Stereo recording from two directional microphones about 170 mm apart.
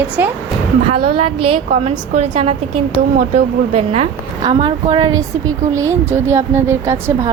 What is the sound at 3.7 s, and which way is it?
A woman's voice, 35° right (ahead or behind).